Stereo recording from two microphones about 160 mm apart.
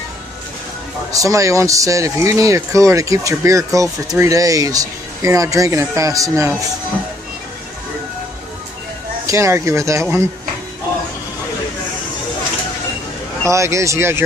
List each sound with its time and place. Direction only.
1.1 s speech: 20° right (ahead or behind)
9.2 s speech: 20° right (ahead or behind)
13.4 s speech: 20° right (ahead or behind)